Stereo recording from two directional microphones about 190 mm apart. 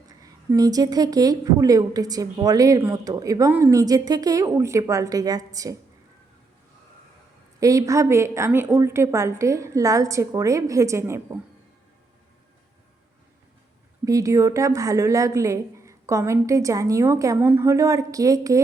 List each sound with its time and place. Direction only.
0.1 s a woman's voice: 20° right (ahead or behind)
7.6 s a woman's voice: 15° right (ahead or behind)
14.0 s a woman's voice: 15° right (ahead or behind)